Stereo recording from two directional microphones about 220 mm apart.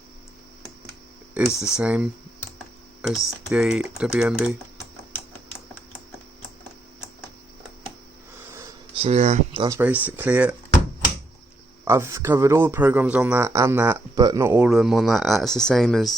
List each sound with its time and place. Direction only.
1.3 s speech: 5° right (ahead or behind)
3.1 s speech: centre (ahead or behind)
9.0 s speech: 30° right (ahead or behind)
9.7 s speech: 5° right (ahead or behind)
11.9 s speech: 15° right (ahead or behind)